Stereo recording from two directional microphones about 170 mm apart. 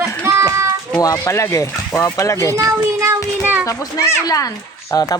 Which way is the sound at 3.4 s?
10° right (ahead or behind).